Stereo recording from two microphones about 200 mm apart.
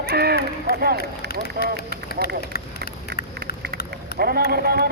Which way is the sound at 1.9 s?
50° left (ahead or behind).